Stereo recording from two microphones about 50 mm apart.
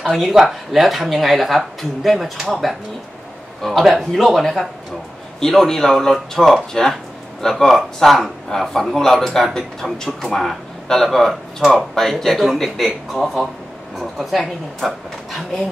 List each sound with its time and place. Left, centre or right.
0.1 s speech: centre